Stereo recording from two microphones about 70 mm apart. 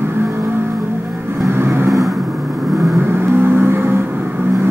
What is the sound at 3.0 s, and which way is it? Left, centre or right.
Vehicle, right.